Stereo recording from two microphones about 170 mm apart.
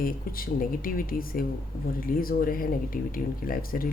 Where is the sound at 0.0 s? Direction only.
55° left (ahead or behind).